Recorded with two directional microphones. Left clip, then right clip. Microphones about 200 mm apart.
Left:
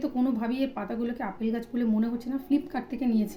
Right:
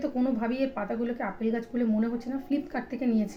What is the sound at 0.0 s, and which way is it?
A woman's voice, 5° left (ahead or behind).